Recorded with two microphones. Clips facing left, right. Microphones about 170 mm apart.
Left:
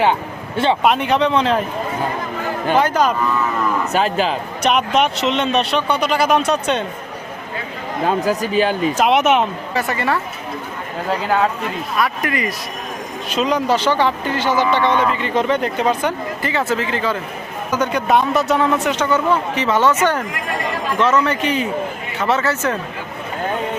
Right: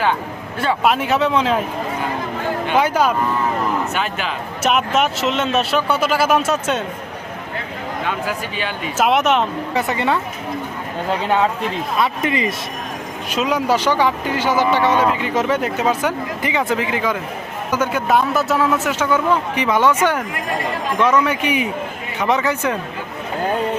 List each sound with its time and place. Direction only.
0.0 s speech: 25° left (ahead or behind)
0.8 s speech: 5° right (ahead or behind)
2.7 s speech: 10° right (ahead or behind)
3.9 s speech: 35° left (ahead or behind)
4.6 s speech: 5° right (ahead or behind)
8.0 s speech: 35° left (ahead or behind)
9.0 s speech: centre (ahead or behind)
9.7 s speech: 20° right (ahead or behind)
11.9 s speech: 25° right (ahead or behind)
13.3 s speech: 10° right (ahead or behind)